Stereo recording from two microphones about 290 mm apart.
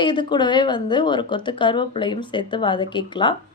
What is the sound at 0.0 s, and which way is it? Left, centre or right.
A woman's voice, centre.